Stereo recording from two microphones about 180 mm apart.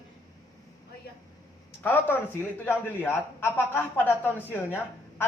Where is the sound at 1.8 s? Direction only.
10° left (ahead or behind).